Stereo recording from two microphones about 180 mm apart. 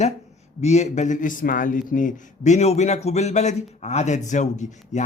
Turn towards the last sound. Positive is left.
turn(degrees=40)  # may be behind; listen again after turning